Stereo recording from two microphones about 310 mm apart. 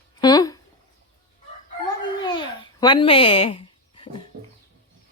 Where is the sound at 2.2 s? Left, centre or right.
Centre.